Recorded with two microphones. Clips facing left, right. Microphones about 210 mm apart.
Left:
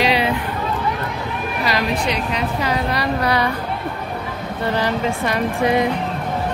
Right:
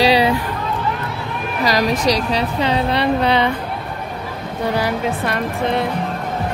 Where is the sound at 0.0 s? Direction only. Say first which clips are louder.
Right 4 dB; 35° right (ahead or behind).